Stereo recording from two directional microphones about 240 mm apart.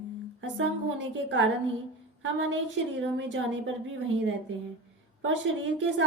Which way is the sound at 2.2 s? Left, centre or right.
Right.